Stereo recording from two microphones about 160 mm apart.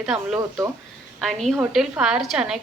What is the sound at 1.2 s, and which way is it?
A woman's voice, centre (ahead or behind).